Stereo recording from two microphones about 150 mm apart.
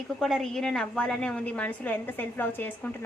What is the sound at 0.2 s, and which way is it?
A woman's voice, centre (ahead or behind).